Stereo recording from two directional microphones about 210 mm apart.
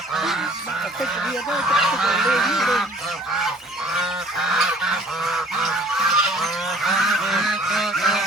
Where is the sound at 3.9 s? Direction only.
Centre (ahead or behind).